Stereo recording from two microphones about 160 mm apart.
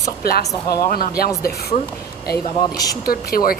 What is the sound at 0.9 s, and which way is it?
Speech, 65° left (ahead or behind).